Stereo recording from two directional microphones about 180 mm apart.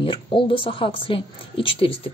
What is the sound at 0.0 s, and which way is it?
A woman's voice, 30° left (ahead or behind).